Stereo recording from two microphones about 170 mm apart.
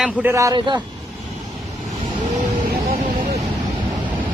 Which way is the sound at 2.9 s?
50° right (ahead or behind).